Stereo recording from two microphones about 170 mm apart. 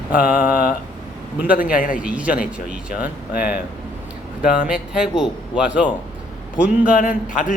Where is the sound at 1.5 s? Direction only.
55° left (ahead or behind).